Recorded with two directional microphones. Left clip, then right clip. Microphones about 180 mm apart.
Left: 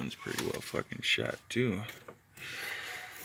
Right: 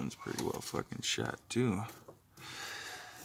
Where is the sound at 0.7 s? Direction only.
Centre (ahead or behind).